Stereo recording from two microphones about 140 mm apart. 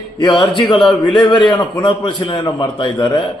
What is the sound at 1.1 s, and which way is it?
A man's voice, 35° left (ahead or behind).